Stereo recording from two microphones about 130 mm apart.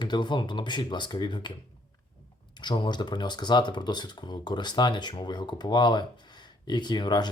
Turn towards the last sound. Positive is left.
turn(degrees=35)  # may be behind; listen again after turning